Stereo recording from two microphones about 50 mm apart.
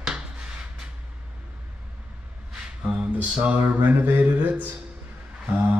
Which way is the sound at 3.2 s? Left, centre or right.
Right.